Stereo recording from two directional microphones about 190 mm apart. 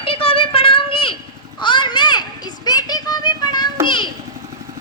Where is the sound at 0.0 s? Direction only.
30° left (ahead or behind).